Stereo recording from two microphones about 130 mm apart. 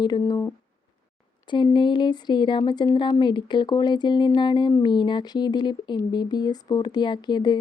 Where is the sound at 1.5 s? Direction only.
35° left (ahead or behind).